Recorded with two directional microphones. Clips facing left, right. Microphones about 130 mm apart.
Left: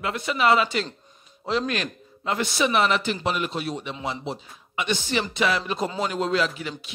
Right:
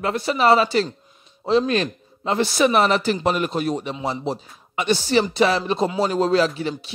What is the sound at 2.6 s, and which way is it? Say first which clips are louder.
A man's voice: right 4 dB; 40° right (ahead or behind).